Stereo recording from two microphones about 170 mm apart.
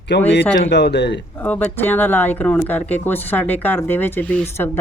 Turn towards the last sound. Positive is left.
turn(degrees=10)  # may be behind; listen again after turning